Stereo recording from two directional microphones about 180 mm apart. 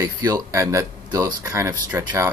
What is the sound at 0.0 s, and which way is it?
Speech, 20° right (ahead or behind).